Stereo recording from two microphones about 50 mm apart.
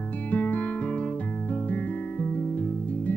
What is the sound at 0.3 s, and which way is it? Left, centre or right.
Music, left.